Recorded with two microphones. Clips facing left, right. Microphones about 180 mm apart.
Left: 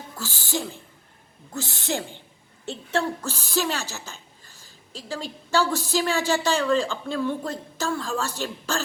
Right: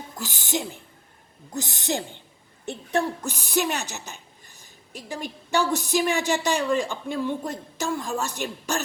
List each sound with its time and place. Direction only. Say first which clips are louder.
0.2 s a woman's voice: right 1 dB; 20° right (ahead or behind)